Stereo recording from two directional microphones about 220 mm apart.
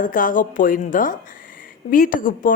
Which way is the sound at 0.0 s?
40° left (ahead or behind).